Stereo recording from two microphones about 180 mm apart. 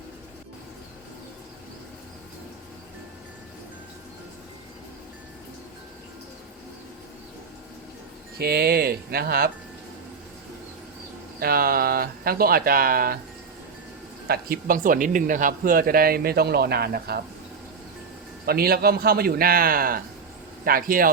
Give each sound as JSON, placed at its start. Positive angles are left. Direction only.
{"t": 8.4, "sound": "speech", "side_deg": -60}
{"t": 11.3, "sound": "speech", "side_deg": -55}
{"t": 14.3, "sound": "speech", "side_deg": -60}
{"t": 18.4, "sound": "speech", "side_deg": -55}